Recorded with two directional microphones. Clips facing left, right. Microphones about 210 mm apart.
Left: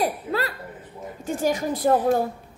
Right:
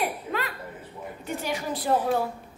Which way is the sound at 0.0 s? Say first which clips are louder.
Left 4 dB; 35° left (ahead or behind).